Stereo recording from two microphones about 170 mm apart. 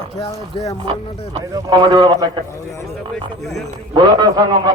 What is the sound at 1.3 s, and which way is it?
Speech, 30° right (ahead or behind).